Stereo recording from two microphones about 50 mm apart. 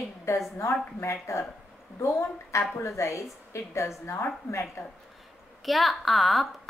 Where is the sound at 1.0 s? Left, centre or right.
Left.